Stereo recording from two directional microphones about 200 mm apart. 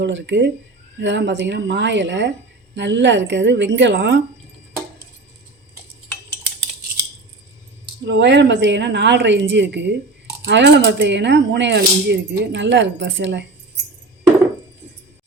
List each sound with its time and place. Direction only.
0.0 s speech: 60° right (ahead or behind)
8.0 s speech: 60° right (ahead or behind)